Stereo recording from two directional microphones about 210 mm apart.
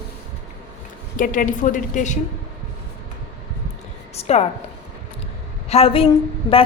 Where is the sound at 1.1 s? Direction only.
40° left (ahead or behind).